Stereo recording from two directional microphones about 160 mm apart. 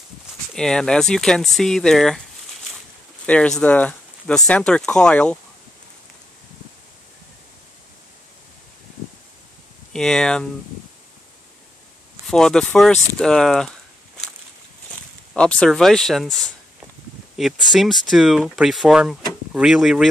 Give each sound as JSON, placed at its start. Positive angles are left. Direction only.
{"t": 0.6, "sound": "speech", "side_deg": 5}
{"t": 3.3, "sound": "speech", "side_deg": 5}
{"t": 9.9, "sound": "speech", "side_deg": 5}
{"t": 12.3, "sound": "speech", "side_deg": 5}
{"t": 15.3, "sound": "speech", "side_deg": 5}
{"t": 17.4, "sound": "speech", "side_deg": 0}